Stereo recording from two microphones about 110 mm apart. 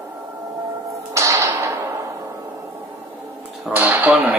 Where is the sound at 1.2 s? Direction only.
30° right (ahead or behind).